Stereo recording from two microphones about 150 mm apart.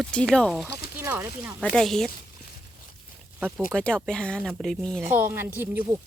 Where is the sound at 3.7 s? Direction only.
5° left (ahead or behind).